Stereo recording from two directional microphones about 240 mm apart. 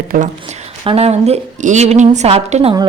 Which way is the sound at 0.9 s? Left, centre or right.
Right.